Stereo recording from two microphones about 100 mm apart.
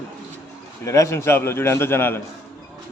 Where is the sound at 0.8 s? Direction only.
30° left (ahead or behind).